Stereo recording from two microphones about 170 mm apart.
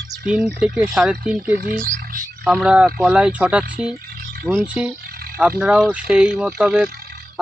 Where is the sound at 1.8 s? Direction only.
55° right (ahead or behind).